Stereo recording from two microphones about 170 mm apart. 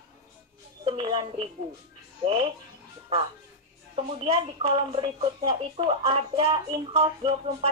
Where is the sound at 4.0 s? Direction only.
35° right (ahead or behind).